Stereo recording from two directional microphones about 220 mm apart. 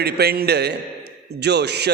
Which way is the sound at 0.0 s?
45° right (ahead or behind).